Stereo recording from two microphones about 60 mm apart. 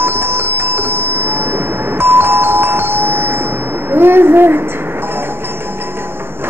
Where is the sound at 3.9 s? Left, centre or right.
Right.